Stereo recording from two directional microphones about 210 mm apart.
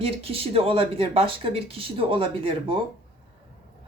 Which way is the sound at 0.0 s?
25° right (ahead or behind).